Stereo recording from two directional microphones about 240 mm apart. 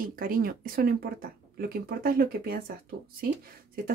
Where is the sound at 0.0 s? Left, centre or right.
Right.